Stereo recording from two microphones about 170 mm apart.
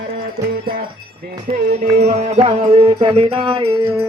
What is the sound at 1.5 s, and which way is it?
Music, 40° right (ahead or behind).